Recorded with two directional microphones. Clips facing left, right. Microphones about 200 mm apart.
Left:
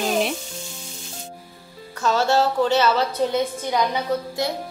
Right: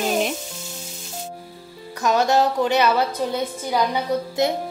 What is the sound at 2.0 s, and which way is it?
Speech, 15° right (ahead or behind).